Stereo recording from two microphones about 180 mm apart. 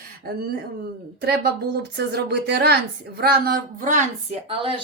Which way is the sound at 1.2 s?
60° right (ahead or behind).